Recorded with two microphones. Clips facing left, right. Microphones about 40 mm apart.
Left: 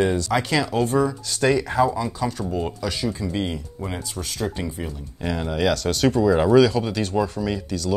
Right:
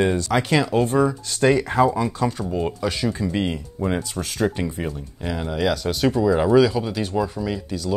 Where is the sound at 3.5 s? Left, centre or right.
Right.